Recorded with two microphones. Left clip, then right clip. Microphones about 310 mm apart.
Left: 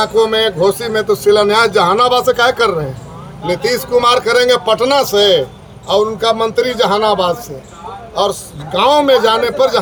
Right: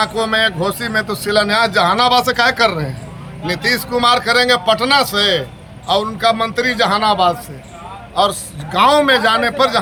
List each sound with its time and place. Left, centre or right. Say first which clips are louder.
0.0 s speech: left 3 dB; centre